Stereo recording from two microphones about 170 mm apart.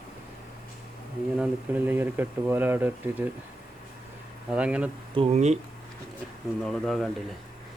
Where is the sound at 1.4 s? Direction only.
10° right (ahead or behind).